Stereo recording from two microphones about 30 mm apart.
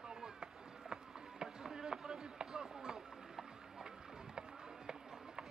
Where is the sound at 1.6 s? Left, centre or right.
Centre.